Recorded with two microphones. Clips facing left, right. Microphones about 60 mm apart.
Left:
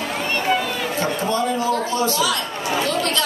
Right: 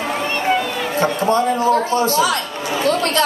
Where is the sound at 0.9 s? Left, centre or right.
Right.